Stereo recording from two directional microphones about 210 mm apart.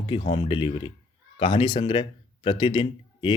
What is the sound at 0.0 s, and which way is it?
Speech, 25° left (ahead or behind).